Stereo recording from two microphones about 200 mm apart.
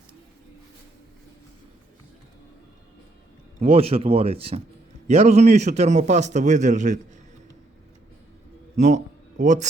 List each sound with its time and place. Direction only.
3.6 s a man's voice: 30° right (ahead or behind)
8.7 s a man's voice: 35° right (ahead or behind)